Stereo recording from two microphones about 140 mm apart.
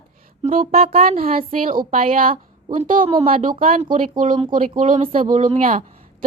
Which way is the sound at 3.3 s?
85° right.